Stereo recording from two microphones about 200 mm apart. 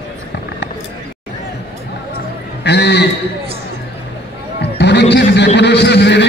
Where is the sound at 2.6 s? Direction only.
55° left (ahead or behind).